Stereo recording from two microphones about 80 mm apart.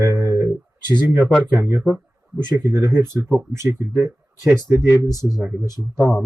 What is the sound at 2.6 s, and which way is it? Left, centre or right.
Speech, right.